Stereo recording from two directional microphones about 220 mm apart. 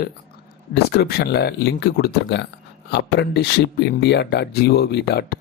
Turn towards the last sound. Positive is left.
turn(degrees=45)  # may be behind; listen again after turning